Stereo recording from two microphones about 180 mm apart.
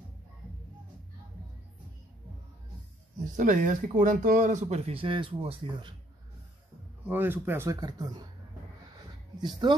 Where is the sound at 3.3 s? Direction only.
45° right (ahead or behind); by 5.9 s 30° right (ahead or behind).